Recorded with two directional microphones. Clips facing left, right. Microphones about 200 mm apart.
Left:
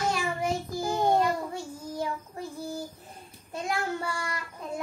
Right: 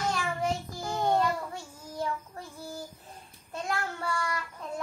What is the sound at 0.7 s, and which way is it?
Child singing, 10° left (ahead or behind).